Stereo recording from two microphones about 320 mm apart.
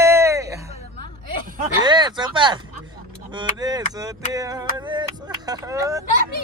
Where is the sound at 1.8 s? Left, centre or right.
Centre.